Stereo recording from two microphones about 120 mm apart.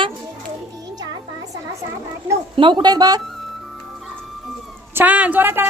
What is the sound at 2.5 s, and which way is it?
Speech, 45° right (ahead or behind).